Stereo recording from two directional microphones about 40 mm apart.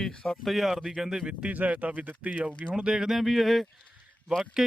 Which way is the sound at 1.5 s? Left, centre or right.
Right.